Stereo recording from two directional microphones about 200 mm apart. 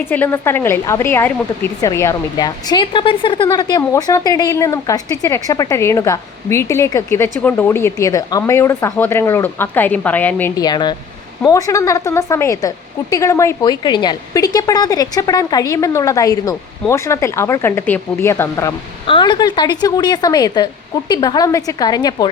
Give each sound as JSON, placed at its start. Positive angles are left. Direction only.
{"t": 0.0, "sound": "speech", "side_deg": 10}
{"t": 10.6, "sound": "a woman's voice", "side_deg": 20}
{"t": 19.0, "sound": "a woman's voice", "side_deg": 25}